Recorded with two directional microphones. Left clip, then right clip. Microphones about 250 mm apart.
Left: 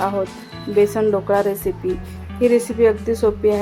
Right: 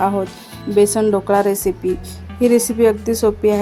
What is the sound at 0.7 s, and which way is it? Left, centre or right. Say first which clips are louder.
Speech: right 2 dB; right.